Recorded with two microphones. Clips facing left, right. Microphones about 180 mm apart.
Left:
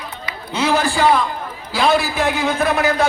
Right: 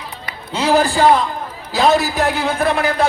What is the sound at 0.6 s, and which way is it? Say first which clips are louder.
A man's voice: right 3 dB; 35° right (ahead or behind).